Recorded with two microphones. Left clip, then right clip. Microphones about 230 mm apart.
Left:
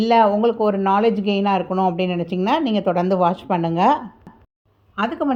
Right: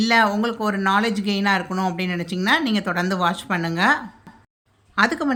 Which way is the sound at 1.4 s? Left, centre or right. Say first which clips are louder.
Left 2 dB; right.